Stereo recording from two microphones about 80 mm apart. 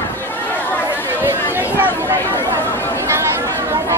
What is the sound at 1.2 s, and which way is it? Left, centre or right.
Chatter, right.